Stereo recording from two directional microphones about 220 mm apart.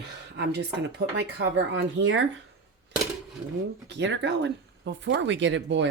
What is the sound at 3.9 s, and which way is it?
Speech, 50° right (ahead or behind).